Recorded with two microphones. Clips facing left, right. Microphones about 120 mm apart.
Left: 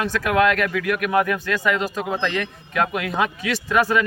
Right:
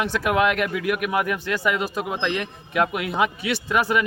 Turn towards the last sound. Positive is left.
turn(degrees=-15)  # may be behind; listen again after turning